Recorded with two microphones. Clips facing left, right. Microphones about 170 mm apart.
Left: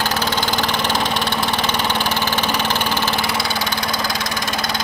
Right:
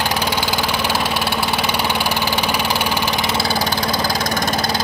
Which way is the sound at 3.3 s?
30° right (ahead or behind).